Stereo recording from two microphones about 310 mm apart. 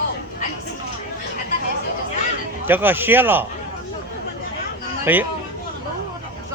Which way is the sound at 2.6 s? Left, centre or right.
Centre.